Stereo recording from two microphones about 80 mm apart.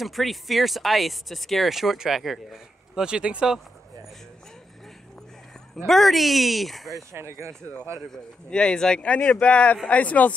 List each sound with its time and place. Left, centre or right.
0.0 s speech: centre
5.9 s speech: centre
6.9 s speech: right
8.1 s speech: centre